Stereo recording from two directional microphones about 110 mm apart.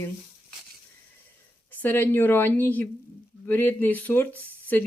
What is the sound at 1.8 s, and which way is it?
Speech, 20° left (ahead or behind).